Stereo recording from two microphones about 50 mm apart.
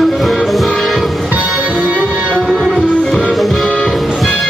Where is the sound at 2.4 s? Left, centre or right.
Centre.